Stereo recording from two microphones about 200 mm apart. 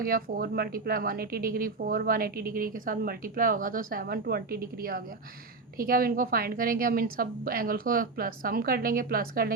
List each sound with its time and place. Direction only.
0.0 s speech: 45° right (ahead or behind)